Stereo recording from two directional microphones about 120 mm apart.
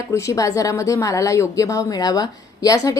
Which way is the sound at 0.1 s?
25° left (ahead or behind).